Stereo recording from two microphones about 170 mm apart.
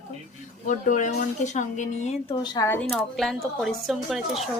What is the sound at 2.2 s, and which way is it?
Speech, 25° left (ahead or behind).